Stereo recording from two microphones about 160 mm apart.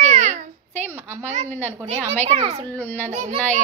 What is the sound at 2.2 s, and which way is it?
Speech, 45° right (ahead or behind).